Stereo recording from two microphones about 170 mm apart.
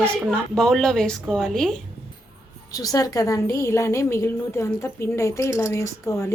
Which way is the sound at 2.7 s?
20° left (ahead or behind).